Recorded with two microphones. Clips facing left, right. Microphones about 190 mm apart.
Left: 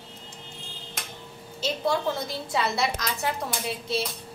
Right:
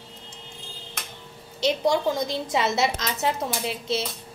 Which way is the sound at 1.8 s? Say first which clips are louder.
Right 1 dB; 15° right (ahead or behind).